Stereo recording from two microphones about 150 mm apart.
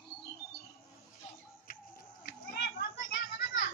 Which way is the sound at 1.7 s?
85° left.